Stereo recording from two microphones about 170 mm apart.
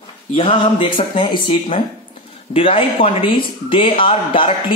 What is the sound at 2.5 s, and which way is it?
Speech, 35° left (ahead or behind).